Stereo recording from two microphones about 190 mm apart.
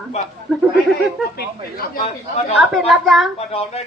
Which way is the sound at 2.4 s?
35° left (ahead or behind).